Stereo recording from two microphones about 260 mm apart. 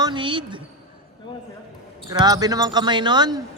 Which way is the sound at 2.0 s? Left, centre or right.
Centre.